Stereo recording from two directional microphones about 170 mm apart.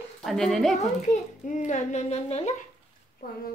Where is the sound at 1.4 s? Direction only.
45° left (ahead or behind).